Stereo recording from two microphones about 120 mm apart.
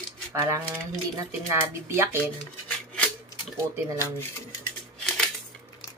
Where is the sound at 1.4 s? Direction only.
20° right (ahead or behind).